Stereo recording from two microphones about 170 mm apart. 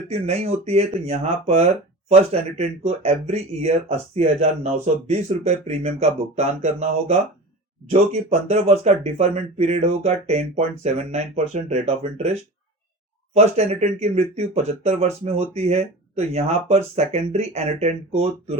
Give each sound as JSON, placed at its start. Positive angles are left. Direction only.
{"t": 0.1, "sound": "speech", "side_deg": -40}